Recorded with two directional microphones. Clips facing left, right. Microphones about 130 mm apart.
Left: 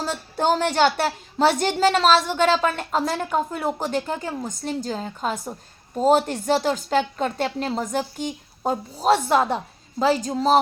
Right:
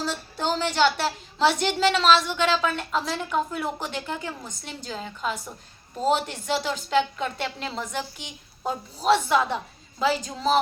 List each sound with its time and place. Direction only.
0.0 s a woman's voice: 50° left (ahead or behind)